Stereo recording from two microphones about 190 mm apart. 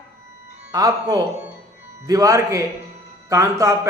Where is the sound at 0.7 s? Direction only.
20° right (ahead or behind).